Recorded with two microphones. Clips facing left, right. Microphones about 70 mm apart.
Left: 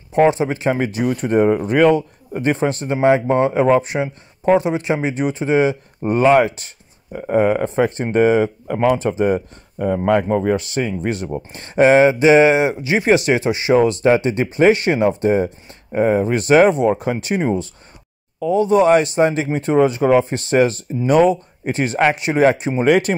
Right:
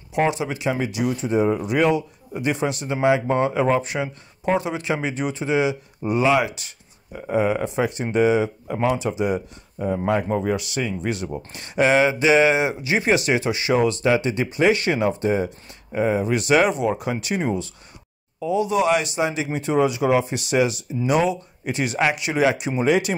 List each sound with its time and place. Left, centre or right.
0.1 s speech: left
1.6 s speech: left
10.0 s speech: left
22.8 s speech: left